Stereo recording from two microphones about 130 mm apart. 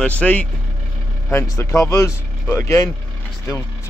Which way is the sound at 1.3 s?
20° left (ahead or behind).